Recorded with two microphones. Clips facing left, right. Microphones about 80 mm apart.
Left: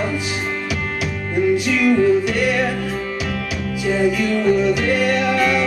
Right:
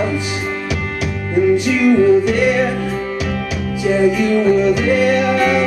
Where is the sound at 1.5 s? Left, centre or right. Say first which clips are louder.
Right 2 dB; centre.